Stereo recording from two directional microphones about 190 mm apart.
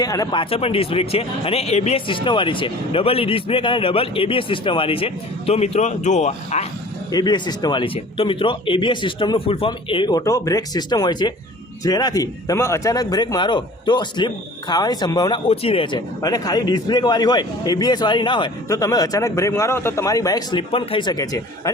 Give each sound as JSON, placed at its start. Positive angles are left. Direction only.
{"t": 0.0, "sound": "speech", "side_deg": 20}
{"t": 7.1, "sound": "speech", "side_deg": 20}